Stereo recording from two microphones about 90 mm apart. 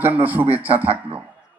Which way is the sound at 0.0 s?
20° right (ahead or behind).